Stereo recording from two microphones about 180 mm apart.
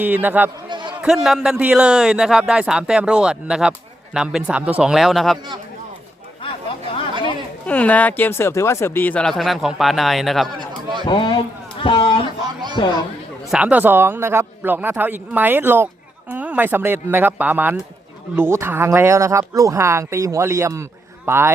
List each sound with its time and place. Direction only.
0.0 s speech: 10° right (ahead or behind)
0.7 s a sound: 25° right (ahead or behind)
1.0 s a man's voice: centre (ahead or behind)
7.7 s speech: 10° left (ahead or behind)
11.0 s a sound: 25° left (ahead or behind)
13.5 s speech: 5° right (ahead or behind)